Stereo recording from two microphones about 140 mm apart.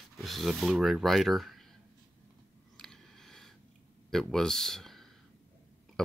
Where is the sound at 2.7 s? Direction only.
5° left (ahead or behind).